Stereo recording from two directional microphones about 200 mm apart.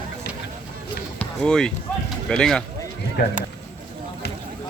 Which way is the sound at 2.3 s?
5° left (ahead or behind).